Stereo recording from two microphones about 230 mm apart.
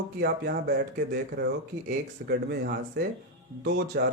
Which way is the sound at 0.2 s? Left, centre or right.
Right.